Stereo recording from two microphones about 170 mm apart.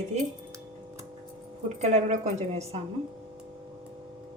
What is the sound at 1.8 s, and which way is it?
A woman's voice, 40° right (ahead or behind).